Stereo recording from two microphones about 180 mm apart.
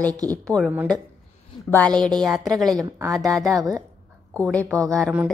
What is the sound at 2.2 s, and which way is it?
Speech, centre (ahead or behind).